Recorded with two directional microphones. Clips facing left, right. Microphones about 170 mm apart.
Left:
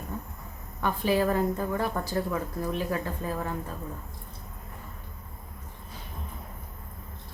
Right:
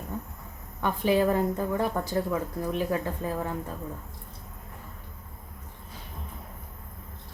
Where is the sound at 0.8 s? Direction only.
20° right (ahead or behind).